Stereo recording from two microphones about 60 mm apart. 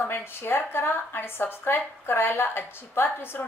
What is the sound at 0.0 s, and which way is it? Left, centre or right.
Speech, left.